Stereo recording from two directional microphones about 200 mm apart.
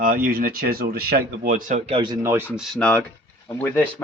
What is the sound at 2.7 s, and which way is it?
A man's voice, 5° left (ahead or behind).